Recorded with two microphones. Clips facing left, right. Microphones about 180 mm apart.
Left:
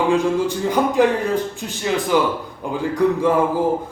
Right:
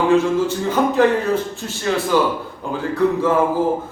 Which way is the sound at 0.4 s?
15° left (ahead or behind).